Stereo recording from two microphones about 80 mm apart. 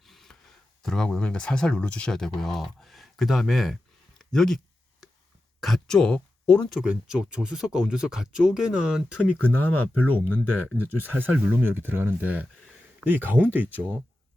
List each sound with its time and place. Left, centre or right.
0.0 s speech: centre
4.2 s a sound: centre
5.5 s speech: centre
6.4 s a sound: left
6.8 s speech: centre
9.2 s speech: left
10.9 s speech: right